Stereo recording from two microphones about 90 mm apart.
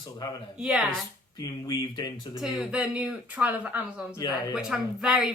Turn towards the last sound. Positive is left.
turn(degrees=-5)  # may be behind; listen again after turning